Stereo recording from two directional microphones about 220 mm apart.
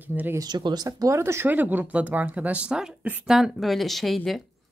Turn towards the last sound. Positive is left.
turn(degrees=0)  # may be behind; listen again after turning